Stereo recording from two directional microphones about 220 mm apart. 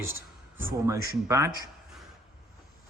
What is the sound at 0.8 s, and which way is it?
Speech, 15° right (ahead or behind).